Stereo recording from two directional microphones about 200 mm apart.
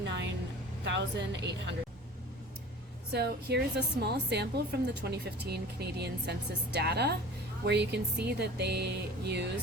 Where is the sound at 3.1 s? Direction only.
55° right (ahead or behind).